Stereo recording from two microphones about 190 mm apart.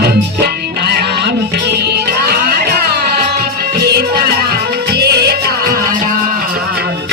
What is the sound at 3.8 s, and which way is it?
Music, 60° right (ahead or behind).